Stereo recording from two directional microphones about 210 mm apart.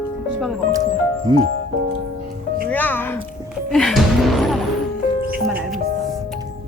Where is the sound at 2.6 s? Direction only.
10° left (ahead or behind).